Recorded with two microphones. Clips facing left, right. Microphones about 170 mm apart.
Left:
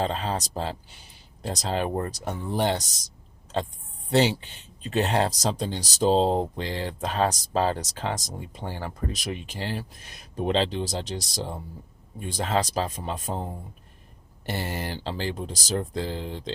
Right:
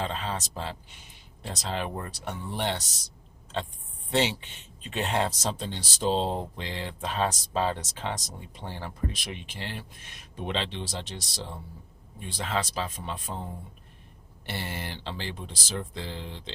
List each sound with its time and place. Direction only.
0.0 s speech: 40° left (ahead or behind)
4.1 s speech: 40° left (ahead or behind)